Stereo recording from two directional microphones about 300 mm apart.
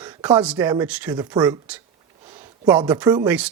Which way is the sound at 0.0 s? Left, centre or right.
Centre.